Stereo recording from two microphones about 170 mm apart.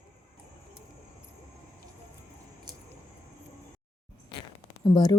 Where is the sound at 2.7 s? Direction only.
25° right (ahead or behind).